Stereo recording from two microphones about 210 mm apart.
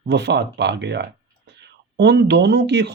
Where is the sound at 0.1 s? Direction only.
55° right (ahead or behind).